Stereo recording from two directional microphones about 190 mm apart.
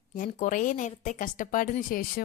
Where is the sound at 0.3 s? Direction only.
40° left (ahead or behind).